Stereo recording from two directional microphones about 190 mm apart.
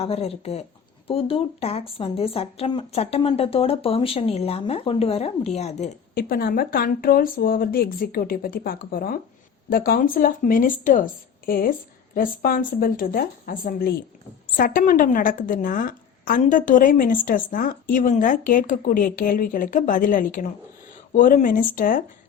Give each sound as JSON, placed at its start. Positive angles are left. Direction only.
{"t": 0.0, "sound": "speech", "side_deg": 30}
{"t": 6.1, "sound": "a woman's voice", "side_deg": 50}